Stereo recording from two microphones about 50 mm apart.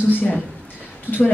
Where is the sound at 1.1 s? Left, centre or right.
Right.